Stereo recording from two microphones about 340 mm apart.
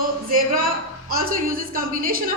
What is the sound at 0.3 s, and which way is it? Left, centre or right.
A woman's voice, right.